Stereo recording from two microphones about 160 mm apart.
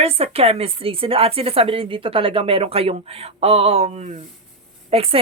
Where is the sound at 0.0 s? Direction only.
40° right (ahead or behind).